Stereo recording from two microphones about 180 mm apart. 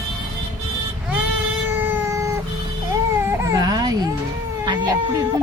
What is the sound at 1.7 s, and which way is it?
Cat, 10° right (ahead or behind).